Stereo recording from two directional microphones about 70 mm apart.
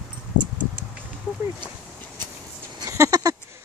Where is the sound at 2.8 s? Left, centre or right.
Right.